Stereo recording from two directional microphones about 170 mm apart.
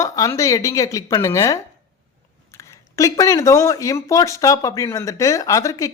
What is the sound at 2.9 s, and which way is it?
A woman's voice, 20° left (ahead or behind).